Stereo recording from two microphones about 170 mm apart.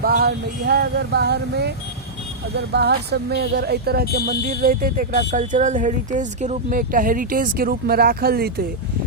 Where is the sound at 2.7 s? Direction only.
75° right (ahead or behind).